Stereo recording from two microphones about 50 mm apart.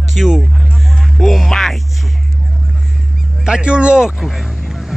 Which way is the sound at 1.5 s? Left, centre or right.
Centre.